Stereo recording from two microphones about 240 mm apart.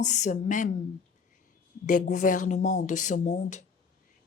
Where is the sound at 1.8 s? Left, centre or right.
Left.